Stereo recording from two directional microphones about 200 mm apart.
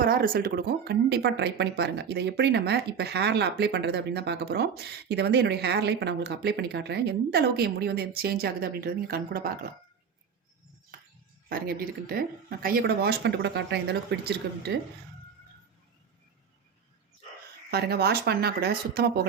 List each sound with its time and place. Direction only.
0.0 s speech: 45° right (ahead or behind)
11.4 s speech: 50° right (ahead or behind)
17.7 s speech: 50° right (ahead or behind)